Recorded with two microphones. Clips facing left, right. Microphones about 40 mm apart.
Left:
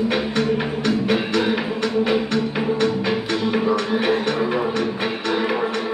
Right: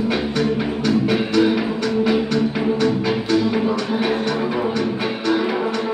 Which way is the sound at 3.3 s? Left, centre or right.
Left.